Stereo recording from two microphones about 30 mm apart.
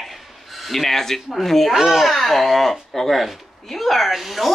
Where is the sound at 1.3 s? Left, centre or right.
Centre.